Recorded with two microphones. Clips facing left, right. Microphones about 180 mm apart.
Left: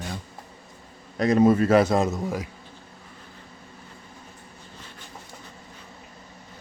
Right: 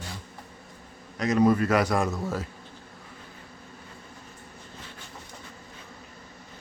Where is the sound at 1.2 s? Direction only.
35° left (ahead or behind); by 2.4 s 15° left (ahead or behind).